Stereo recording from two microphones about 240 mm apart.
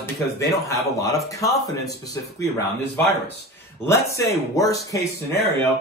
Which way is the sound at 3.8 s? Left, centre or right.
Centre.